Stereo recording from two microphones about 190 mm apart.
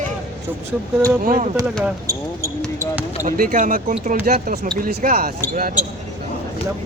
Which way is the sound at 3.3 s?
45° right (ahead or behind).